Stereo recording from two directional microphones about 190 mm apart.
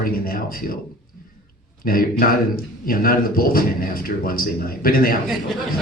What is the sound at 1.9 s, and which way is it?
Speech, 50° left (ahead or behind).